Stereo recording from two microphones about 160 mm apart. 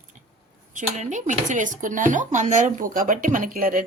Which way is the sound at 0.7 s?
50° right (ahead or behind).